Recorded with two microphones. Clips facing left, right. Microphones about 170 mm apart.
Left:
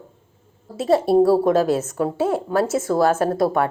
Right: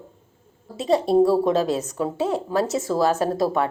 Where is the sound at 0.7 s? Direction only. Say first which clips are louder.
Left 3 dB; 20° right (ahead or behind).